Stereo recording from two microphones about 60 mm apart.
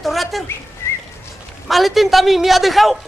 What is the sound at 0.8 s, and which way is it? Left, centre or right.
Whistling, left.